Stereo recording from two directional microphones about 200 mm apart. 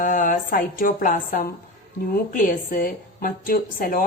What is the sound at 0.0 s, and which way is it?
A woman's voice, 40° left (ahead or behind).